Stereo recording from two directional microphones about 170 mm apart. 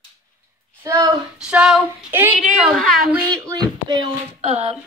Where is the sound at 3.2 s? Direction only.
20° right (ahead or behind).